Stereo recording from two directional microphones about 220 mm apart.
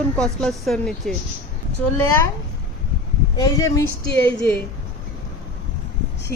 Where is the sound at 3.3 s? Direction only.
15° left (ahead or behind).